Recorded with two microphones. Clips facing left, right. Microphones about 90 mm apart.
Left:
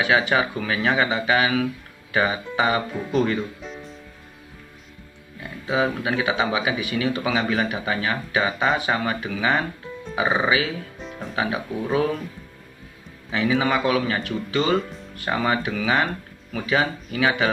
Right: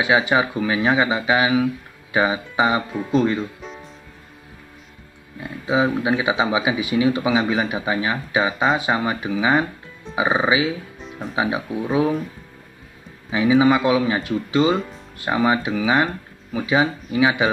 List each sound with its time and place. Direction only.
0.3 s speech: 15° right (ahead or behind)
3.6 s music: centre (ahead or behind)
5.7 s speech: 20° right (ahead or behind)
11.0 s music: centre (ahead or behind)
11.3 s speech: 15° right (ahead or behind)
13.3 s speech: 15° right (ahead or behind)